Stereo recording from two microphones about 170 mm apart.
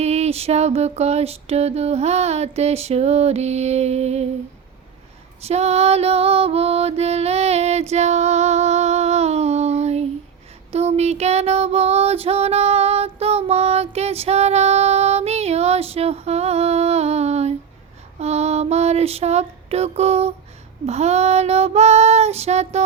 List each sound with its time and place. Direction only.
0.0 s mantra: 40° right (ahead or behind)
5.4 s mantra: 40° right (ahead or behind)
10.7 s female singing: 40° right (ahead or behind)
18.2 s a sound: 40° right (ahead or behind)
20.8 s mantra: 40° right (ahead or behind)